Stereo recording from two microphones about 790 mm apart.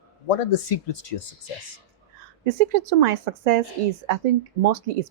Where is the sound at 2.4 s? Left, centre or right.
Right.